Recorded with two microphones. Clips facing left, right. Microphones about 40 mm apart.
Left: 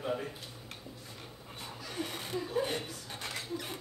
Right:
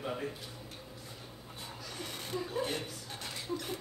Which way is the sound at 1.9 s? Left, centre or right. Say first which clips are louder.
Left 2 dB; centre.